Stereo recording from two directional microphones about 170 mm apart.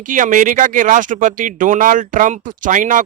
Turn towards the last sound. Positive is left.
turn(degrees=-50)  # may be behind; listen again after turning